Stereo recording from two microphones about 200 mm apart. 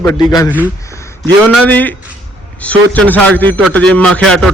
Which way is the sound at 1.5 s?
10° left (ahead or behind).